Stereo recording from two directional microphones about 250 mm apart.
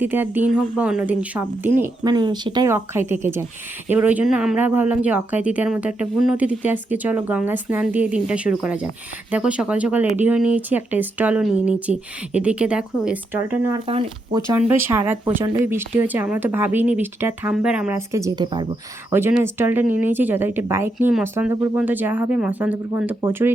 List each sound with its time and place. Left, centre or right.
0.0 s speech: centre
13.8 s speech: right
14.5 s speech: centre